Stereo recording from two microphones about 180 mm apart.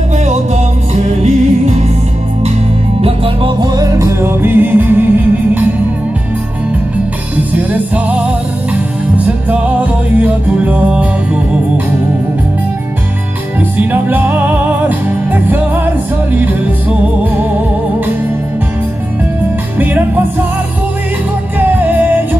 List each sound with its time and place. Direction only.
1.0 s music: 40° right (ahead or behind)
3.0 s music: 30° right (ahead or behind); by 5.7 s 10° right (ahead or behind)
7.5 s music: 10° right (ahead or behind)
13.7 s music: 10° right (ahead or behind)
19.8 s music: 10° right (ahead or behind)
21.5 s music: 10° right (ahead or behind)